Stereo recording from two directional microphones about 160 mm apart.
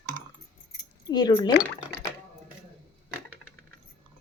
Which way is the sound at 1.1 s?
25° left (ahead or behind).